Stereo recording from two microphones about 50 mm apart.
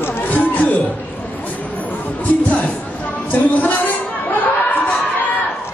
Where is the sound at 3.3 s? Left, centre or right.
Left.